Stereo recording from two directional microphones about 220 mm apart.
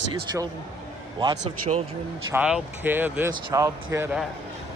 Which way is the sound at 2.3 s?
5° right (ahead or behind).